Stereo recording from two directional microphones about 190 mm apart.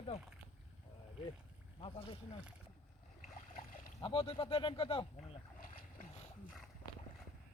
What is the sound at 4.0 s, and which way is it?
Speech, 25° left (ahead or behind).